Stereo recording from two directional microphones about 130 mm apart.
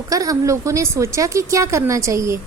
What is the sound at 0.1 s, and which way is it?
A woman's voice, 25° right (ahead or behind).